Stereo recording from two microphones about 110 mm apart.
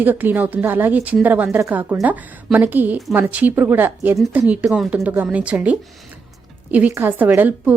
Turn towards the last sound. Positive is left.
turn(degrees=-15)  # may be behind; listen again after turning